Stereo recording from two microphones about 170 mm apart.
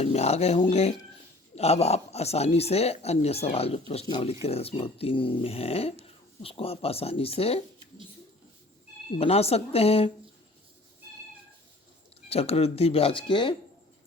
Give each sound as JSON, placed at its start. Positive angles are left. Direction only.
{"t": 0.0, "sound": "speech", "side_deg": 40}
{"t": 9.1, "sound": "speech", "side_deg": 35}
{"t": 12.3, "sound": "speech", "side_deg": 35}